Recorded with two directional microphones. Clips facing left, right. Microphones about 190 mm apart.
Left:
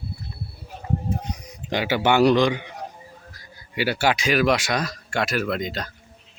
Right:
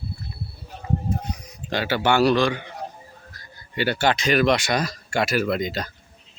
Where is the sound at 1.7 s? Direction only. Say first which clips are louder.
Left 1 dB; 15° left (ahead or behind); by 5.9 s centre (ahead or behind).